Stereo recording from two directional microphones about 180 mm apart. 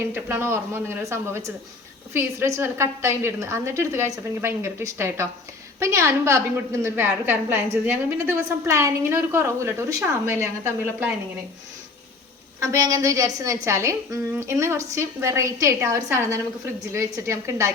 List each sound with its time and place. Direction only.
0.1 s a woman's voice: 15° right (ahead or behind)
12.5 s a woman's voice: 15° right (ahead or behind)